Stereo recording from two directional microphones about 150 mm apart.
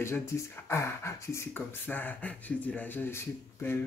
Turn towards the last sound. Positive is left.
turn(degrees=15)  # may be behind; listen again after turning